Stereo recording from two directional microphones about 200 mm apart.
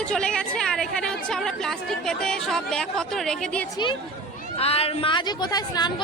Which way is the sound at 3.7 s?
25° left (ahead or behind).